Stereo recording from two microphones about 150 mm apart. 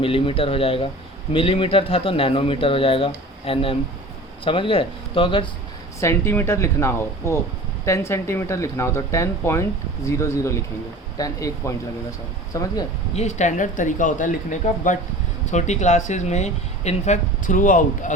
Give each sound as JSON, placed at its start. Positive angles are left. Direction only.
{"t": 0.0, "sound": "speech", "side_deg": 35}
{"t": 6.0, "sound": "speech", "side_deg": 15}
{"t": 13.1, "sound": "speech", "side_deg": 50}